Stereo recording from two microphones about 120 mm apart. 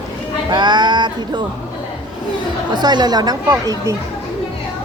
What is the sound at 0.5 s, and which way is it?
Speech, 40° right (ahead or behind).